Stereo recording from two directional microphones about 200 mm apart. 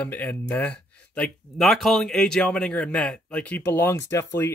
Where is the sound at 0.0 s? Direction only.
10° left (ahead or behind).